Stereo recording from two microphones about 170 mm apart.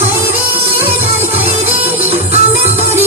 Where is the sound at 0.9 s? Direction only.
10° right (ahead or behind).